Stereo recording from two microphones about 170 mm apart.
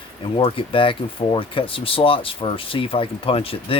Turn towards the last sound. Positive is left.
turn(degrees=35)  # may be behind; listen again after turning